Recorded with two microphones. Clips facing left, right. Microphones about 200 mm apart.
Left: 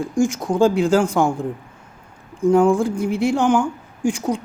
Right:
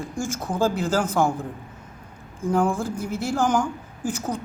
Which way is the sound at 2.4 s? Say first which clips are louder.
Left 8 dB; 10° left (ahead or behind).